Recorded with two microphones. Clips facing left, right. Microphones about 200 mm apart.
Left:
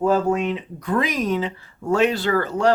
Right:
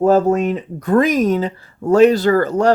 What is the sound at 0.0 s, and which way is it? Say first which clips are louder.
Speech: right 6 dB; 40° right (ahead or behind).